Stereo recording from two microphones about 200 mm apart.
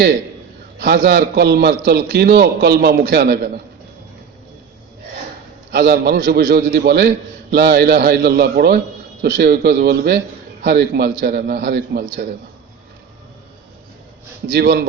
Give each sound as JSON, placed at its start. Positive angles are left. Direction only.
{"t": 0.8, "sound": "a man's voice", "side_deg": -55}
{"t": 5.7, "sound": "a man's voice", "side_deg": -55}
{"t": 14.5, "sound": "a man's voice", "side_deg": -55}